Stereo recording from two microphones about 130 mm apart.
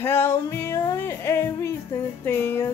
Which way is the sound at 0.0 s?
15° left (ahead or behind).